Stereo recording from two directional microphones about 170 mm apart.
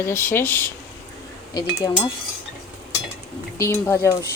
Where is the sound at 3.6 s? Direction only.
15° left (ahead or behind).